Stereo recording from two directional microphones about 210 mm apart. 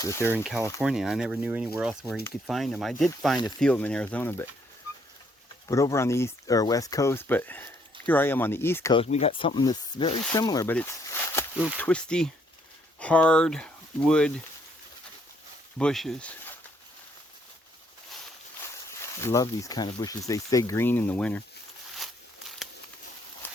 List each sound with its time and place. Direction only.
0.0 s speech: 15° left (ahead or behind)
0.8 s speech: centre (ahead or behind)
5.6 s speech: 15° left (ahead or behind)
8.9 s speech: 30° left (ahead or behind); by 14.4 s 5° left (ahead or behind)
15.8 s speech: centre (ahead or behind)
18.9 s speech: 15° left (ahead or behind)
21.9 s a sound: centre (ahead or behind)